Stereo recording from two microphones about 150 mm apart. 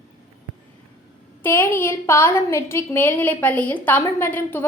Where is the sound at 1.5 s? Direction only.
15° left (ahead or behind).